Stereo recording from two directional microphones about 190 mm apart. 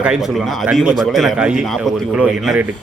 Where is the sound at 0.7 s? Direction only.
Centre (ahead or behind).